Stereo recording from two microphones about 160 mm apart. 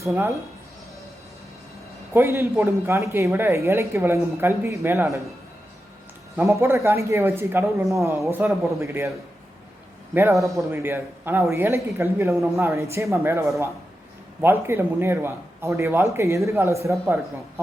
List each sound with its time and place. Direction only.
0.1 s speech: 15° right (ahead or behind)
2.1 s speech: 15° right (ahead or behind)
6.3 s speech: 15° right (ahead or behind)
10.3 s speech: centre (ahead or behind)
10.7 s speech: 15° right (ahead or behind)
14.4 s speech: 15° right (ahead or behind)